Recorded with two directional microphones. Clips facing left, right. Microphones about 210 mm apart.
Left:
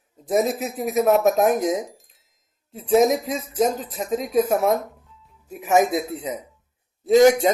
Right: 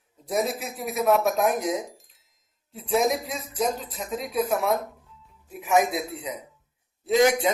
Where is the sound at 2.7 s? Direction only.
45° left (ahead or behind).